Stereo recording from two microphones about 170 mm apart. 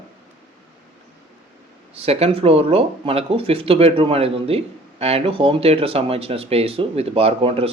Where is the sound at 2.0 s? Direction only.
35° right (ahead or behind).